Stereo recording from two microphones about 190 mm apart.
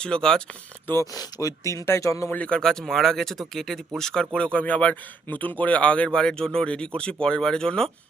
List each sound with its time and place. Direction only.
0.0 s speech: 5° left (ahead or behind)
0.9 s speech: 15° left (ahead or behind)